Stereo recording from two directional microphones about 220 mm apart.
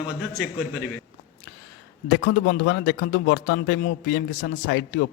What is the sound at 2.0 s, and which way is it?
A man's voice, 65° left (ahead or behind).